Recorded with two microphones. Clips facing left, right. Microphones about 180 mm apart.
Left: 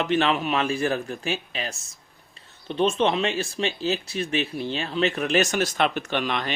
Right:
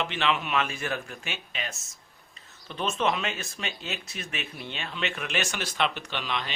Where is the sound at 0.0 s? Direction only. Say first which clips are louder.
Left 6 dB; 40° left (ahead or behind).